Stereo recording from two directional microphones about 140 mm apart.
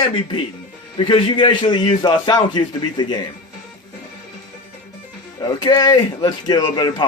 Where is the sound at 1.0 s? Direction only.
35° left (ahead or behind).